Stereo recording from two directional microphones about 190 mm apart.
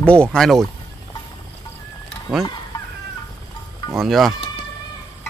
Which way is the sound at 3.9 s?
Centre (ahead or behind).